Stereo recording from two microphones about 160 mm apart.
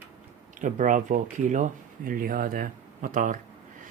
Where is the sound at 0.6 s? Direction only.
55° right (ahead or behind).